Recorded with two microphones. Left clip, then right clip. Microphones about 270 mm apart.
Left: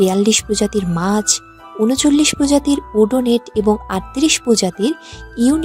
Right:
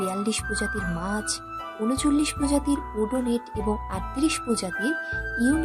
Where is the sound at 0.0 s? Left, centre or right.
Left.